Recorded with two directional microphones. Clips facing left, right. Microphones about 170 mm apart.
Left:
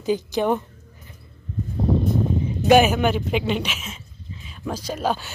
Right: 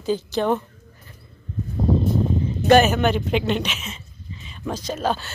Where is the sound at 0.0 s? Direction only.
15° left (ahead or behind).